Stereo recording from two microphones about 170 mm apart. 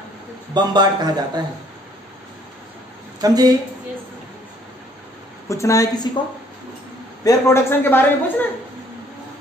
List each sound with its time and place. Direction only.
0.6 s a man's voice: 25° right (ahead or behind)
3.2 s speech: 20° right (ahead or behind)
5.5 s a woman's voice: 20° left (ahead or behind)
7.2 s a man's voice: 15° left (ahead or behind)